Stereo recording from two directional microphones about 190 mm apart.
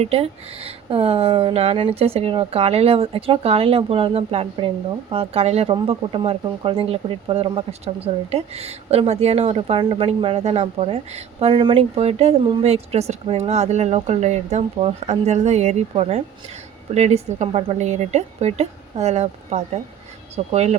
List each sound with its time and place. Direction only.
0.0 s speech: 30° right (ahead or behind)